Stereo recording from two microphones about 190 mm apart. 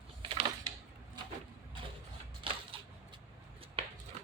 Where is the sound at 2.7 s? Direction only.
30° right (ahead or behind).